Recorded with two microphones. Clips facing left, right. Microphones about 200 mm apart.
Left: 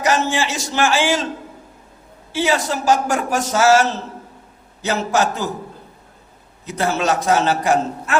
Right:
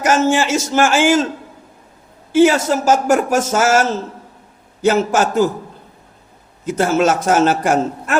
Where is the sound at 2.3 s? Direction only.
50° right (ahead or behind).